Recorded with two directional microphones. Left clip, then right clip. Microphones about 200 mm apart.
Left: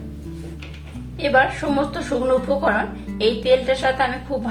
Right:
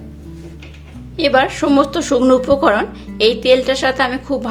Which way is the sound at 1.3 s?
50° right (ahead or behind).